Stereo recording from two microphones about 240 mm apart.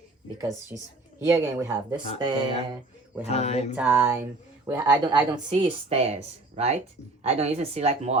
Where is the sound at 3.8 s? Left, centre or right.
Centre.